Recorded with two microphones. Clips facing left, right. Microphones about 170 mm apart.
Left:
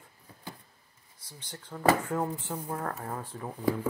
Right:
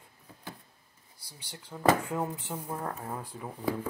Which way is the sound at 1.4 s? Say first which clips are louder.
Even; 5° right (ahead or behind).